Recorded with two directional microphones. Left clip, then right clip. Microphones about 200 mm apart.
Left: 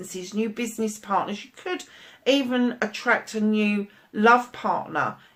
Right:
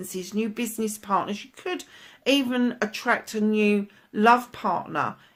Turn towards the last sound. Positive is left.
turn(degrees=-50)  # may be behind; listen again after turning